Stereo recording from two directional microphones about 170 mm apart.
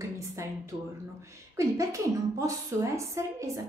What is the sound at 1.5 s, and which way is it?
A woman's voice, 20° right (ahead or behind).